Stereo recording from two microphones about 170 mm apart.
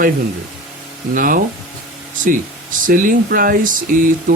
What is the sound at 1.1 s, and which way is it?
Speech, 55° right (ahead or behind).